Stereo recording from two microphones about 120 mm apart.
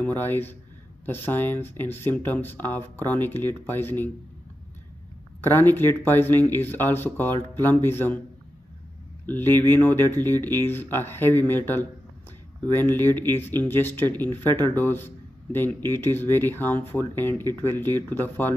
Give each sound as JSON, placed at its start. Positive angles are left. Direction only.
{"t": 0.0, "sound": "speech", "side_deg": 15}
{"t": 5.4, "sound": "speech", "side_deg": 20}
{"t": 9.2, "sound": "speech", "side_deg": 15}